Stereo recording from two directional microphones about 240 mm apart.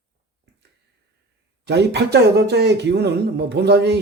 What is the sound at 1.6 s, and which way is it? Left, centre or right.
Speech, right.